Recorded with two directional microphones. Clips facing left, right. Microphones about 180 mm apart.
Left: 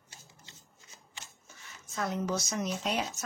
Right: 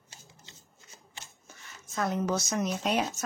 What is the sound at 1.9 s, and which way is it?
A woman's voice, 55° right (ahead or behind).